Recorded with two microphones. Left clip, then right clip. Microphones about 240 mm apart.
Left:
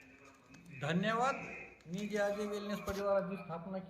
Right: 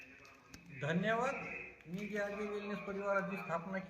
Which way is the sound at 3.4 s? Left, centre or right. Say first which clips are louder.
Right 4 dB; right.